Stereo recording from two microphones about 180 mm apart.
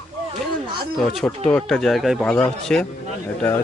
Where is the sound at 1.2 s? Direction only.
5° left (ahead or behind).